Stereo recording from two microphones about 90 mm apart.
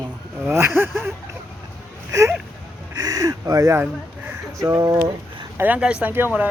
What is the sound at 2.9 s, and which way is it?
Speech, 45° right (ahead or behind).